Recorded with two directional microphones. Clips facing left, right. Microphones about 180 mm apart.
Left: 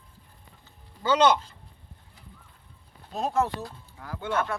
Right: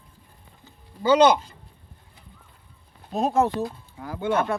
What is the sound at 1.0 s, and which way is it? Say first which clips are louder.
Speech: right 4 dB; 10° right (ahead or behind).